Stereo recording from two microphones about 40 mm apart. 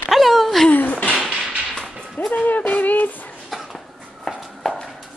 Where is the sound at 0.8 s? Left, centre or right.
Left.